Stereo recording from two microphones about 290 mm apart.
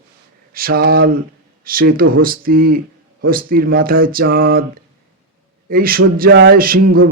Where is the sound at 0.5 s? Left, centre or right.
Right.